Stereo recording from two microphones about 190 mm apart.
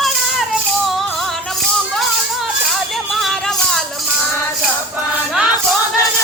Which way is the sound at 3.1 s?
Centre (ahead or behind).